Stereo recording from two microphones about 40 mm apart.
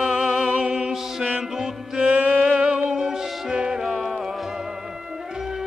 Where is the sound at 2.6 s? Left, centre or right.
Right.